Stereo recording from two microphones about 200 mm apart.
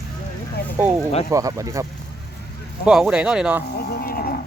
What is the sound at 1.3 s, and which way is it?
Speech, 15° right (ahead or behind).